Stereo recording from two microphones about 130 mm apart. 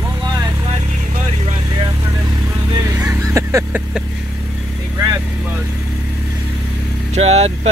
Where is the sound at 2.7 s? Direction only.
25° right (ahead or behind).